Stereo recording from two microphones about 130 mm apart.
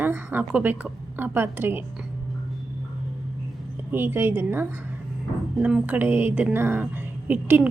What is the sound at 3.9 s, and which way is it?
A woman's voice, 15° right (ahead or behind).